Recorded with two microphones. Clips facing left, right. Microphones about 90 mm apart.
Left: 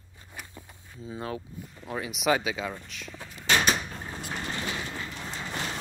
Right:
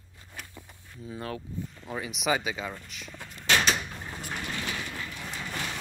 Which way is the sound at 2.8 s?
Centre (ahead or behind).